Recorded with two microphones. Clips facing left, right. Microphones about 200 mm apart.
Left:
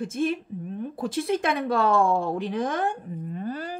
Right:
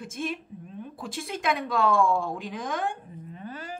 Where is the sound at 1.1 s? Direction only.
35° left (ahead or behind).